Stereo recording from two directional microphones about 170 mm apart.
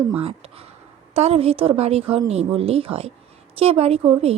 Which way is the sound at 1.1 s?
35° right (ahead or behind).